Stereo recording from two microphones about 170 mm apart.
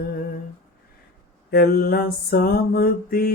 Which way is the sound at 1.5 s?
65° left (ahead or behind).